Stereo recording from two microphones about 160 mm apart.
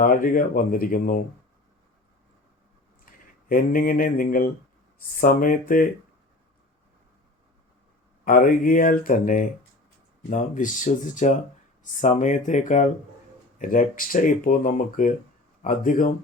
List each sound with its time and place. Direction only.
0.0 s speech: 60° left (ahead or behind)
3.1 s speech: 60° left (ahead or behind)
8.2 s speech: 60° left (ahead or behind)